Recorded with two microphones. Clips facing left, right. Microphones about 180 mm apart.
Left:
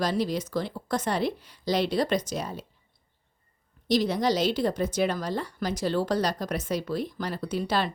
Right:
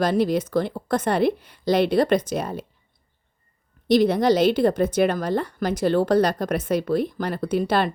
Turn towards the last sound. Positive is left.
turn(degrees=-55)  # may be behind; listen again after turning